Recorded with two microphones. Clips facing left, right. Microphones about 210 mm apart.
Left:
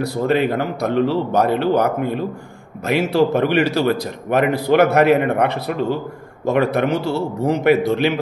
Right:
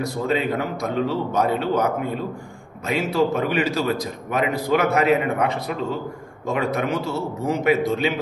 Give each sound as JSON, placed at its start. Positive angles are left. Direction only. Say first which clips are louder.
{"t": 0.0, "sound": "a man's voice", "louder": "left 5 dB", "side_deg": 65}